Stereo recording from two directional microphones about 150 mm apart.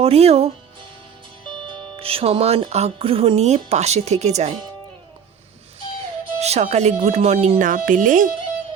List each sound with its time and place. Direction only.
0.0 s speech: 40° right (ahead or behind)
1.5 s music: 30° right (ahead or behind); by 4.5 s 50° right (ahead or behind)
6.4 s music: 45° right (ahead or behind)